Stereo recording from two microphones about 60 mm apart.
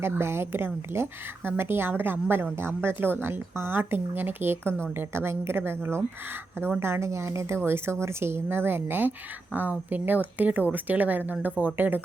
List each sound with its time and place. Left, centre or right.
0.0 s a woman's voice: right